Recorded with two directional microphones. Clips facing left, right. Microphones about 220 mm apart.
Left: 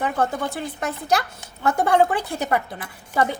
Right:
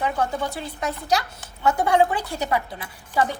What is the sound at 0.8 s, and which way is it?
Speech, 50° left (ahead or behind).